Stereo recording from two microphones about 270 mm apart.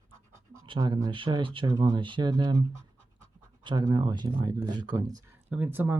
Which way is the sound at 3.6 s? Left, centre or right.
Centre.